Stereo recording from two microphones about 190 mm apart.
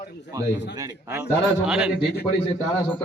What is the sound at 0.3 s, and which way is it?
A man's voice, 20° right (ahead or behind).